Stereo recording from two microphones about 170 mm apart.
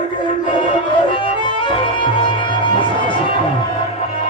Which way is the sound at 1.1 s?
30° left (ahead or behind).